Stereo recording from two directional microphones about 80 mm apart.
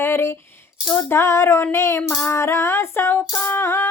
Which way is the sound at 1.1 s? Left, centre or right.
Left.